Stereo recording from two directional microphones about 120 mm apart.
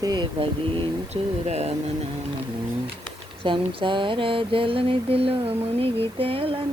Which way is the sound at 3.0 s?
45° right (ahead or behind).